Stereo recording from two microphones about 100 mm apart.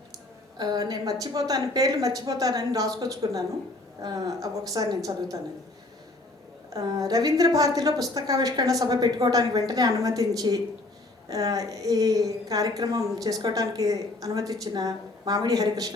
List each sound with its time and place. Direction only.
0.6 s a woman's voice: 40° right (ahead or behind)
6.7 s a woman's voice: 40° right (ahead or behind)